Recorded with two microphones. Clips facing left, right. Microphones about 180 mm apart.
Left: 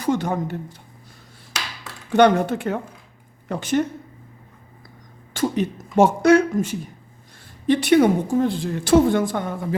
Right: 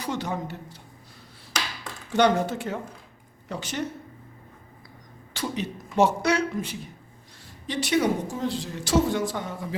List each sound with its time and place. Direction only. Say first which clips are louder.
0.0 s speech: left 8 dB; 50° left (ahead or behind)
2.1 s a woman's voice: left 6 dB; 60° left (ahead or behind)
5.3 s a woman's voice: left 8 dB; 50° left (ahead or behind)